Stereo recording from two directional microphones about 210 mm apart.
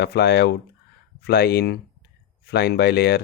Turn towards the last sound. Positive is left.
turn(degrees=50)  # may be behind; listen again after turning